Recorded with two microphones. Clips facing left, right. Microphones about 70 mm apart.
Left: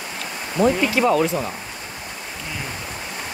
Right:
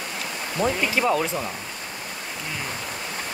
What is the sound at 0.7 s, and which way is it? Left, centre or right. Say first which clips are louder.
Speech: left 4 dB; centre.